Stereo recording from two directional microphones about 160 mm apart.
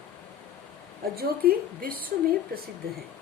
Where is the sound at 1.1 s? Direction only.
65° right (ahead or behind).